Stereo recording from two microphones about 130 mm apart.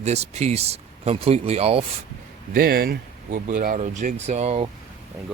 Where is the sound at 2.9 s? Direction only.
90° right; by 4.7 s 55° right (ahead or behind).